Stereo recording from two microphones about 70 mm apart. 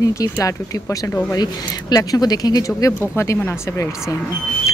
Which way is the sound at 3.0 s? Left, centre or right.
Left.